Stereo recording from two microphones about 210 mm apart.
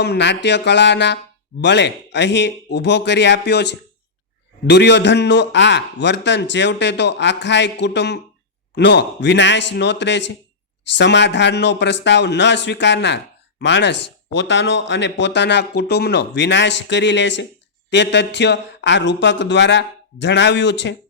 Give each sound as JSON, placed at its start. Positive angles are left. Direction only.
{"t": 0.0, "sound": "speech", "side_deg": 55}